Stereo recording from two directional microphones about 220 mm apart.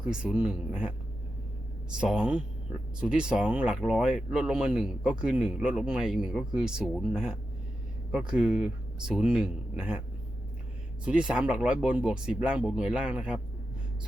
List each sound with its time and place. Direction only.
0.0 s speech: 5° right (ahead or behind)
11.0 s speech: 5° right (ahead or behind)